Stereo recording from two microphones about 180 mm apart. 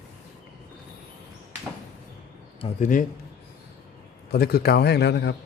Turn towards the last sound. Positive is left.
turn(degrees=70)  # may be behind; listen again after turning